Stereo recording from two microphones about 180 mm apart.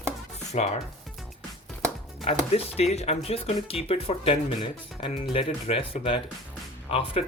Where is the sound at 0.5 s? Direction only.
40° left (ahead or behind).